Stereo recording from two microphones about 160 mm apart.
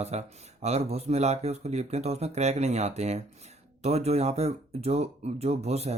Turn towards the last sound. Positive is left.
turn(degrees=-40)  # may be behind; listen again after turning